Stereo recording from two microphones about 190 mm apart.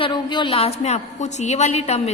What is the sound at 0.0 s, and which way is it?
A woman's voice, 25° left (ahead or behind).